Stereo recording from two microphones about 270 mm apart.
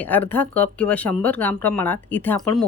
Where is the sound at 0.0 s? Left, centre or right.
Centre.